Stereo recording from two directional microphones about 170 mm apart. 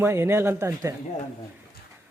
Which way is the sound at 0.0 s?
15° right (ahead or behind).